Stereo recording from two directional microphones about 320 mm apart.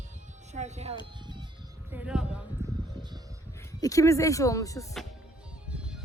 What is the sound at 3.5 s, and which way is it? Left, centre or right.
Speech, centre.